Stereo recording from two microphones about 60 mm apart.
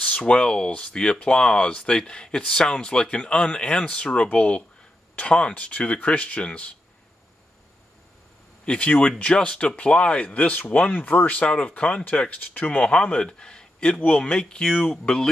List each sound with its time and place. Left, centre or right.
0.0 s speech: centre
8.6 s speech: centre